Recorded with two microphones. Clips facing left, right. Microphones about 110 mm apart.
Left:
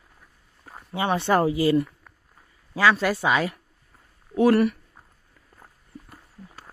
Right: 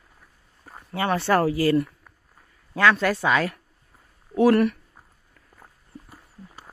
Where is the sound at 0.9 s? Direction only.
20° left (ahead or behind).